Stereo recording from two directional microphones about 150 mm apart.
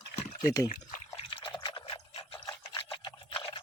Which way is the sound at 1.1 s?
35° left (ahead or behind).